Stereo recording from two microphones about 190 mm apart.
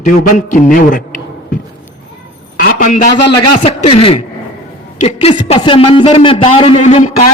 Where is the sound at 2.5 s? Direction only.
45° left (ahead or behind).